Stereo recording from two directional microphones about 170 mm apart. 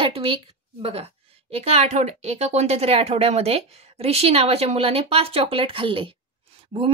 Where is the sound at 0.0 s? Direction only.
35° right (ahead or behind).